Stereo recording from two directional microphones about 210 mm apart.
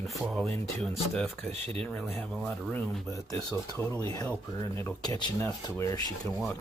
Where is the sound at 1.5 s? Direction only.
30° right (ahead or behind).